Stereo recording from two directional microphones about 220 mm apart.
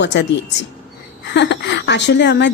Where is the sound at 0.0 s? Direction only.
50° left (ahead or behind).